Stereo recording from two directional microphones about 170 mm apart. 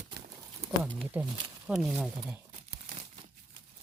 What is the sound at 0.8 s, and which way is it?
Speech, 5° right (ahead or behind).